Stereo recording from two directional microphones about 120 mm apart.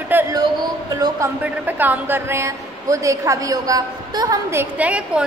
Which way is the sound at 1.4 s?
15° right (ahead or behind).